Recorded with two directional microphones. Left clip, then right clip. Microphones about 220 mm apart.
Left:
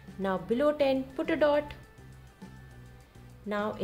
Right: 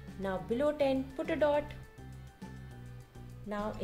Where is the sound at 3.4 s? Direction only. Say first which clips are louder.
Left 6 dB; 20° left (ahead or behind).